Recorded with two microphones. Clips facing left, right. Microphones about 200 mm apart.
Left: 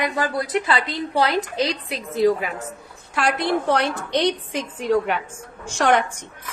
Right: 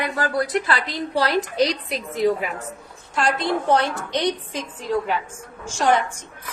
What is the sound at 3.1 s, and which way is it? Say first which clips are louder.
A woman's voice: left 1 dB; 65° left (ahead or behind).